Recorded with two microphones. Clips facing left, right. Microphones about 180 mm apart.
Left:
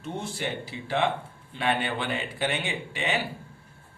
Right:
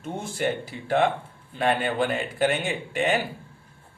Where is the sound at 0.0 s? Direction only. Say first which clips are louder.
Right 5 dB; 50° right (ahead or behind).